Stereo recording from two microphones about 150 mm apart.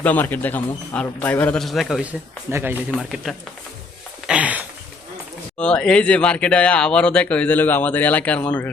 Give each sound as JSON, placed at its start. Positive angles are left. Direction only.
{"t": 0.0, "sound": "speech", "side_deg": 10}
{"t": 2.5, "sound": "speech", "side_deg": -15}
{"t": 3.0, "sound": "speech", "side_deg": 0}
{"t": 4.3, "sound": "a sound", "side_deg": -10}
{"t": 5.5, "sound": "speech", "side_deg": 5}